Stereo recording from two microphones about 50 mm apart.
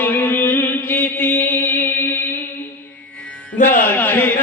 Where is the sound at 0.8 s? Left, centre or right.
Left.